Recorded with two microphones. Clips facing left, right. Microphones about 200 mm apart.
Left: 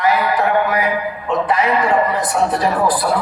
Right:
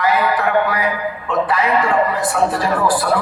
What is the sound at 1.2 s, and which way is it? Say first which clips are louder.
A man's voice: left 1 dB; 20° left (ahead or behind).